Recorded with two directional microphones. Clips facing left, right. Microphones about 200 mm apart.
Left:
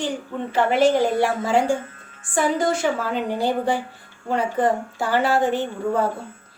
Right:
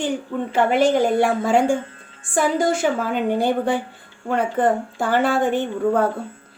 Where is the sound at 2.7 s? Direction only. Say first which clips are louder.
Right 2 dB; 50° right (ahead or behind).